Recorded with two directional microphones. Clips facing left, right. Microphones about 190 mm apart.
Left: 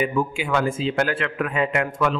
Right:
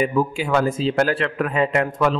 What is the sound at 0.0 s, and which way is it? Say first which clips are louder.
A man's voice: right 3 dB; 35° right (ahead or behind).